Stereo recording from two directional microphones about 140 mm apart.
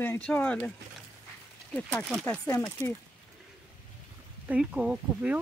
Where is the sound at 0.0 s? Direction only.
15° left (ahead or behind).